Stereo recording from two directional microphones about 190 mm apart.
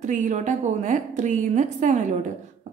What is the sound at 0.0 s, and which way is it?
A woman's voice, 40° right (ahead or behind).